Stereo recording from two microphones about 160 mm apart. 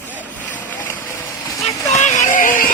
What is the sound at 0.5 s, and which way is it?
Vehicle, 10° left (ahead or behind).